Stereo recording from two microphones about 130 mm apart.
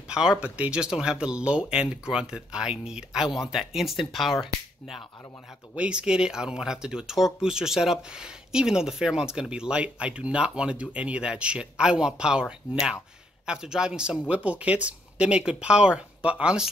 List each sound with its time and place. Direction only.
0.1 s speech: 5° right (ahead or behind)
5.8 s speech: 10° right (ahead or behind)